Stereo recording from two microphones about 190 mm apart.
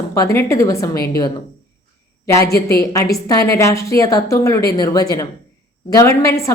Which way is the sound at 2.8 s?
15° left (ahead or behind).